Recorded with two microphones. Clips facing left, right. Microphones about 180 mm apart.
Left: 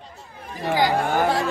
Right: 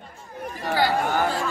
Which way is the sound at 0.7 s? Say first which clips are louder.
Left 2 dB; 15° left (ahead or behind).